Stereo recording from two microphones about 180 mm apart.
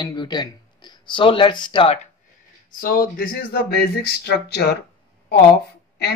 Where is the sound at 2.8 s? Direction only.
55° left (ahead or behind).